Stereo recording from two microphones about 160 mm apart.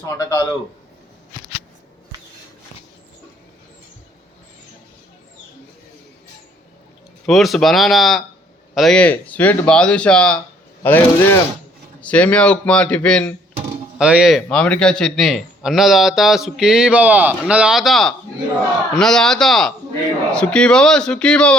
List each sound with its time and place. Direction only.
0.0 s a man's voice: 20° left (ahead or behind)
7.3 s a man's voice: centre (ahead or behind)
14.0 s a man's voice: 5° right (ahead or behind)